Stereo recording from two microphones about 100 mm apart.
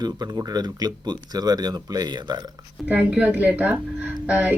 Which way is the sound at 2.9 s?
15° right (ahead or behind).